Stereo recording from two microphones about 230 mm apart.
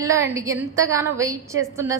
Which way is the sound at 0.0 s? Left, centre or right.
Centre.